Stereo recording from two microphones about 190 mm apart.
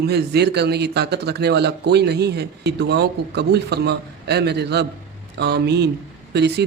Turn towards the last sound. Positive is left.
turn(degrees=-60)  # may be behind; listen again after turning